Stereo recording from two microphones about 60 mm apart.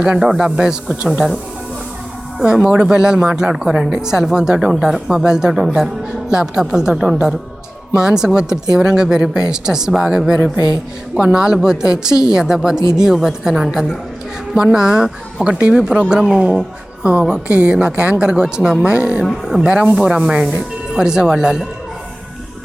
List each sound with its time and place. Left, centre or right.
0.0 s a woman's voice: centre
2.4 s a woman's voice: centre